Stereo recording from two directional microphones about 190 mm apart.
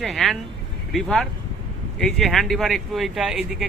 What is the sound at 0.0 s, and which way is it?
Speech, centre (ahead or behind).